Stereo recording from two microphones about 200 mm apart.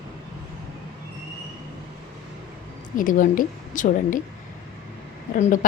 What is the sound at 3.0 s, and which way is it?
A woman's voice, 40° left (ahead or behind).